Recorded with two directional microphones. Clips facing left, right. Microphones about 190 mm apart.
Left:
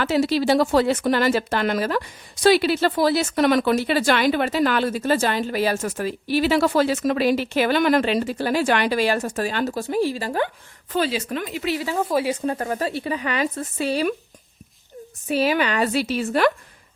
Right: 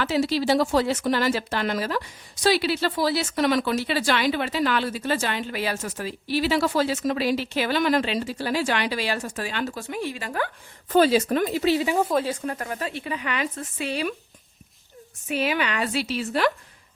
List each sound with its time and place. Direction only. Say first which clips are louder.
0.0 s speech: left 3 dB; 55° left (ahead or behind); by 10.5 s 30° left (ahead or behind)
10.9 s speech: right 5 dB; 45° right (ahead or behind); by 11.9 s 30° right (ahead or behind)
12.0 s speech: left 2 dB; 10° left (ahead or behind)
12.5 s speech: left 6 dB; 30° left (ahead or behind)
15.3 s speech: left 4 dB; 35° left (ahead or behind)